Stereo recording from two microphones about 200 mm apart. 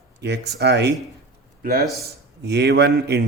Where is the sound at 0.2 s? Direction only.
55° right (ahead or behind).